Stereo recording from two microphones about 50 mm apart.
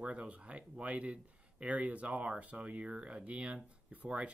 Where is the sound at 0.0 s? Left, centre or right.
Right.